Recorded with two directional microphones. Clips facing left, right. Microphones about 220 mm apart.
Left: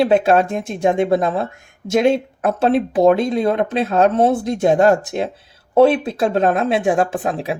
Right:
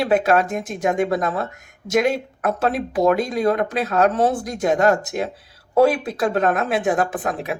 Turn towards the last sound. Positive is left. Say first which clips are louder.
# left 3 dB
turn(degrees=30)  # may be behind; listen again after turning